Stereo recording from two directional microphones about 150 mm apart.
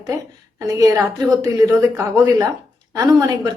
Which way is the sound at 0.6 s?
25° right (ahead or behind).